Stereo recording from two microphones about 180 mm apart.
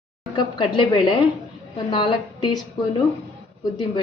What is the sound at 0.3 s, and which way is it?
A woman's voice, 25° left (ahead or behind).